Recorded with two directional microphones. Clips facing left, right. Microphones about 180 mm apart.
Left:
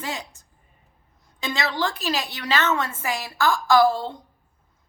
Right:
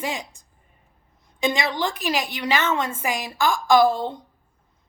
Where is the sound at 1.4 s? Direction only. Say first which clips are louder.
Right 2 dB; 15° right (ahead or behind).